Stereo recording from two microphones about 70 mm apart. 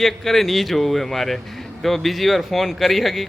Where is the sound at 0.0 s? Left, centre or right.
Centre.